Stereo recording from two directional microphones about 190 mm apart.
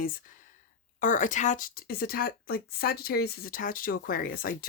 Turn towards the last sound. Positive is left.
turn(degrees=50)  # may be behind; listen again after turning